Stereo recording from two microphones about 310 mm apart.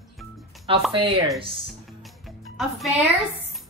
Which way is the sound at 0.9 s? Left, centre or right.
Centre.